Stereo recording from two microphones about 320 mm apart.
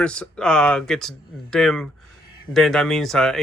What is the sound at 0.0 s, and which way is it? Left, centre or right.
Speech, centre.